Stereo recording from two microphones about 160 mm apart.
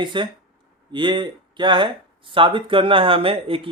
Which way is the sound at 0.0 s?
30° right (ahead or behind).